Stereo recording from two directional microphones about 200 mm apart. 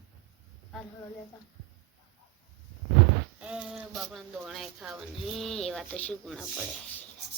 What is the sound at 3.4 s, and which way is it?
Speech, 5° right (ahead or behind).